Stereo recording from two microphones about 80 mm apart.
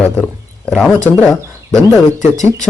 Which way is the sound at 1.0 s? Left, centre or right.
Centre.